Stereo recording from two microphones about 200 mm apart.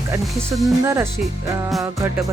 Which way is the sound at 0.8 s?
15° right (ahead or behind).